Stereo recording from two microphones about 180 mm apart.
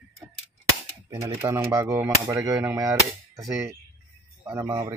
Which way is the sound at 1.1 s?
15° right (ahead or behind).